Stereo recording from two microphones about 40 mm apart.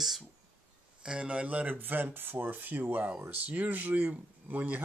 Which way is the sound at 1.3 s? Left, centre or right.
Right.